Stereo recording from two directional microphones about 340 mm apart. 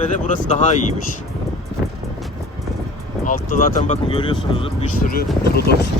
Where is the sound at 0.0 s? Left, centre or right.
Left.